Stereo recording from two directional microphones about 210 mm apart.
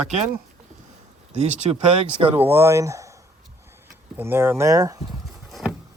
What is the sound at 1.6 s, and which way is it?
Speech, 25° right (ahead or behind).